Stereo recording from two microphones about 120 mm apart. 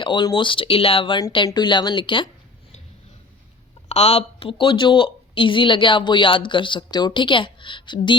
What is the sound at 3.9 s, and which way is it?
Speech, 60° left (ahead or behind).